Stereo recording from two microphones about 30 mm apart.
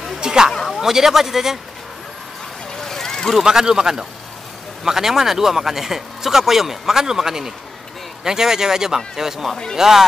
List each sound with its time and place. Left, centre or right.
0.2 s a sound: right
0.7 s speech: centre
2.8 s vehicle: centre
3.4 s speech: right